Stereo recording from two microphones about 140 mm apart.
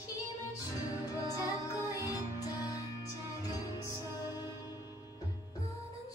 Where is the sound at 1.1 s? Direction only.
25° left (ahead or behind).